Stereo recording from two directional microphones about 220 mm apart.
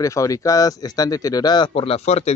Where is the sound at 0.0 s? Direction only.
15° left (ahead or behind).